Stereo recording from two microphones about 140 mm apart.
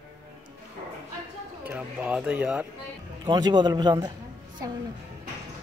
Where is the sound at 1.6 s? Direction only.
10° right (ahead or behind).